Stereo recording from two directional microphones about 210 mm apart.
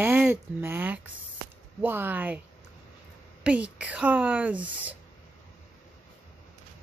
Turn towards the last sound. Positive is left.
turn(degrees=-5)  # may be behind; listen again after turning